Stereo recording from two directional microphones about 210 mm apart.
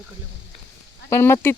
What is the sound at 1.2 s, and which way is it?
Speech, 10° left (ahead or behind).